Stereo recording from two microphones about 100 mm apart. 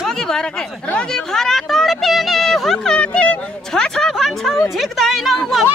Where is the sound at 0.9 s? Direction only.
5° left (ahead or behind).